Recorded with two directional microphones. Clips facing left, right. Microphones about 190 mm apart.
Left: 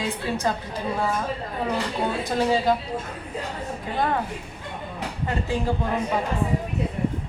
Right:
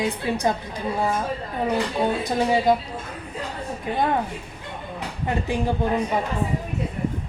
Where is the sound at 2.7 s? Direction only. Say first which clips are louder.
Right 3 dB; 15° right (ahead or behind).